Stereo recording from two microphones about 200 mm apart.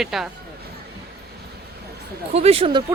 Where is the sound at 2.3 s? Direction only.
30° right (ahead or behind).